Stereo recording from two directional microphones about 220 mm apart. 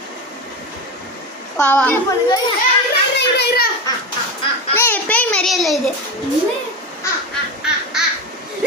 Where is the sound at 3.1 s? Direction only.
50° left (ahead or behind).